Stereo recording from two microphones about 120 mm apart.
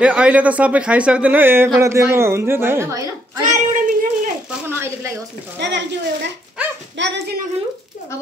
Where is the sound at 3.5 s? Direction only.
90° right.